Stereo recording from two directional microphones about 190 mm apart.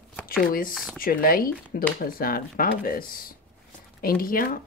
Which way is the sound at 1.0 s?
50° left (ahead or behind).